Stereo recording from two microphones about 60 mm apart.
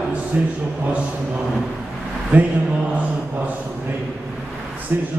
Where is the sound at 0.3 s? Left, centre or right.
Right.